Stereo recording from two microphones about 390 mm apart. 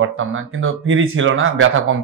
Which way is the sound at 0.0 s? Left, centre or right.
Right.